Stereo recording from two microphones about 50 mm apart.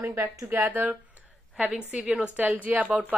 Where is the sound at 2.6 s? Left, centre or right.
Right.